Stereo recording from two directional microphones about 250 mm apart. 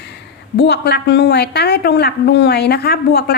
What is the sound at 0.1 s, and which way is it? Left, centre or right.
A woman's voice, left.